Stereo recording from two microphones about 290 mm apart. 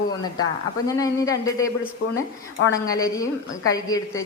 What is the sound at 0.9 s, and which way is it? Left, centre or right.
Speech, centre.